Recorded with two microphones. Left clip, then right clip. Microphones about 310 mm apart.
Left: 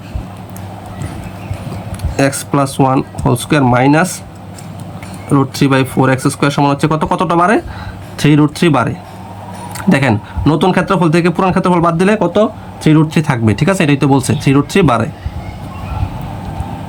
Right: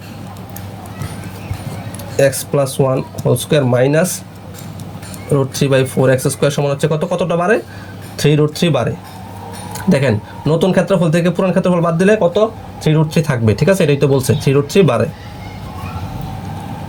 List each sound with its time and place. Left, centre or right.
2.1 s speech: centre
5.5 s speech: centre